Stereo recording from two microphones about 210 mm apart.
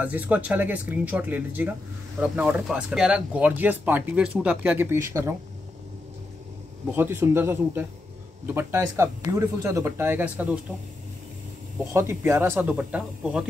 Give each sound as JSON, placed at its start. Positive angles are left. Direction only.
{"t": 0.0, "sound": "speech", "side_deg": -5}
{"t": 7.0, "sound": "speech", "side_deg": -10}
{"t": 11.9, "sound": "speech", "side_deg": -10}